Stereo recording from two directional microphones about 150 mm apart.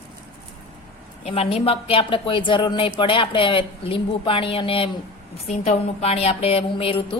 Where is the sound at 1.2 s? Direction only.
40° left (ahead or behind).